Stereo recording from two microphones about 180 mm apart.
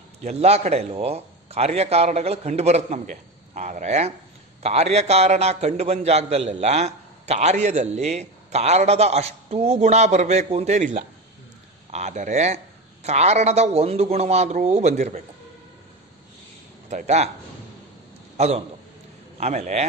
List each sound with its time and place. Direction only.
0.2 s a man's voice: 35° right (ahead or behind)
16.9 s a man's voice: 40° right (ahead or behind)
19.4 s a man's voice: 40° right (ahead or behind)